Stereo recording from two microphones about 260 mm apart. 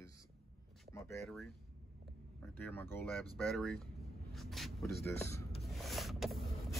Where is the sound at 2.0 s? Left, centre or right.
Centre.